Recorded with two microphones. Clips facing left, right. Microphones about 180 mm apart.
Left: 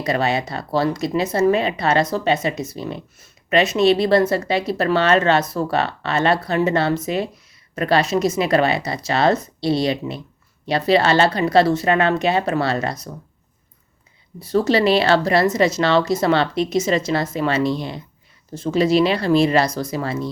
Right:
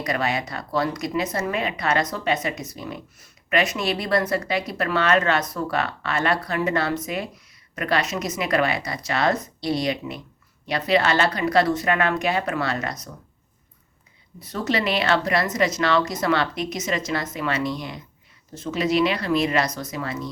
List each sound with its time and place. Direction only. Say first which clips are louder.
0.0 s speech: left 5 dB; 25° left (ahead or behind)
14.4 s speech: left 8 dB; 30° left (ahead or behind)